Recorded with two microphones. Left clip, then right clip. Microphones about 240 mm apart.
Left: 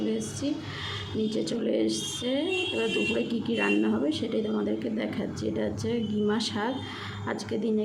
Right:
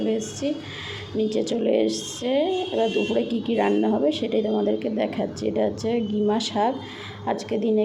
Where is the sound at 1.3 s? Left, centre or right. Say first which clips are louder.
Right 7 dB; centre.